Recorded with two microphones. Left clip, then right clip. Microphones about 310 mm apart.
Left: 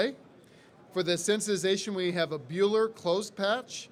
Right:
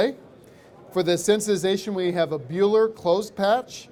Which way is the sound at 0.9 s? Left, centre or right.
Right.